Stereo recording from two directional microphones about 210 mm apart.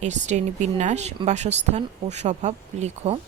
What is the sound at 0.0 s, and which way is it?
A woman's voice, 35° right (ahead or behind).